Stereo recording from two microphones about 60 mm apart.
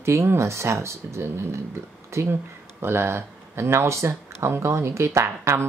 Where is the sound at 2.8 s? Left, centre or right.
Right.